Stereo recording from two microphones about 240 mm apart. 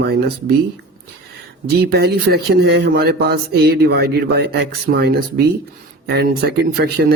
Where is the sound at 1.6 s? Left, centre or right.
Right.